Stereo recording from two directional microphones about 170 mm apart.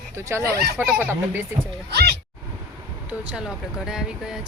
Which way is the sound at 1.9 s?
65° right (ahead or behind).